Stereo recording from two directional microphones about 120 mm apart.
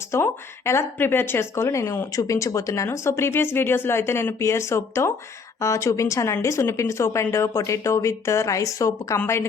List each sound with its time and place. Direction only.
0.1 s speech: 20° left (ahead or behind)